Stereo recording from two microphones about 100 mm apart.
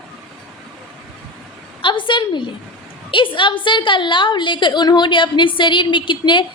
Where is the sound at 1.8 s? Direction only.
55° left (ahead or behind).